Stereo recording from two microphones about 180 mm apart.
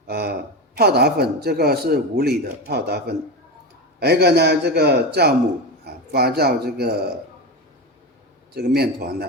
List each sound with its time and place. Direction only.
0.1 s a sound: 60° right (ahead or behind)
0.8 s speech: 65° right (ahead or behind)
8.5 s speech: 60° right (ahead or behind)